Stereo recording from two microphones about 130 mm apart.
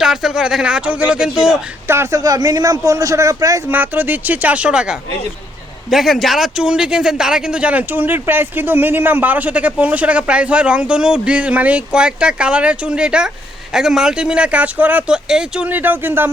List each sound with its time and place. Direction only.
0.0 s speech: 5° right (ahead or behind)
1.9 s a man's voice: 20° right (ahead or behind)